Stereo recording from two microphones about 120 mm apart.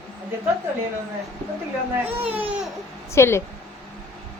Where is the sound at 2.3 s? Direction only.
10° right (ahead or behind).